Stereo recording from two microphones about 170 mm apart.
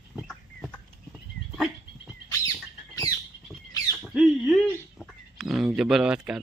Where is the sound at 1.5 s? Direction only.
Centre (ahead or behind).